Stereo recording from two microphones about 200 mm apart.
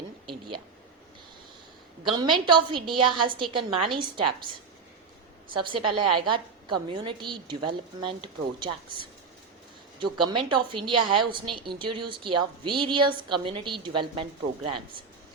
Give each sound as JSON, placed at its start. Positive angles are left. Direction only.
{"t": 2.0, "sound": "a woman's voice", "side_deg": -25}
{"t": 5.6, "sound": "a woman's voice", "side_deg": -25}
{"t": 10.0, "sound": "a woman's voice", "side_deg": -25}